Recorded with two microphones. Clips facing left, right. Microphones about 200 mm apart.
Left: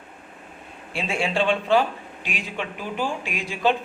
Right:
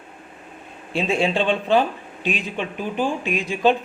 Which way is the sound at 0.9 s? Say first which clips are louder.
Right 4 dB; 20° right (ahead or behind).